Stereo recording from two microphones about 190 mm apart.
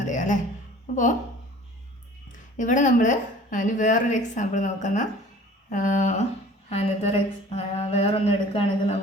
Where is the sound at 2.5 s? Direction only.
40° left (ahead or behind).